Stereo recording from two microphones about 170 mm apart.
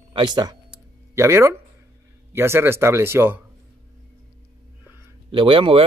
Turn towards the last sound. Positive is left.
turn(degrees=-30)  # may be behind; listen again after turning